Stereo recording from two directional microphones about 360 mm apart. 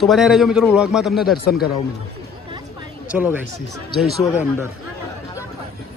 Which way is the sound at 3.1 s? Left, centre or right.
Centre.